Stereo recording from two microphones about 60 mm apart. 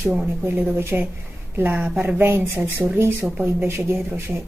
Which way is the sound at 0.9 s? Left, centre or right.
Right.